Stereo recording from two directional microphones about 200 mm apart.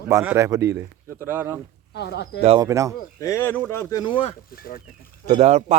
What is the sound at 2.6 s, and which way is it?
Speech, 15° right (ahead or behind).